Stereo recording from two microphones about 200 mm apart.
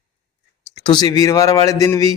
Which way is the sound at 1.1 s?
15° left (ahead or behind).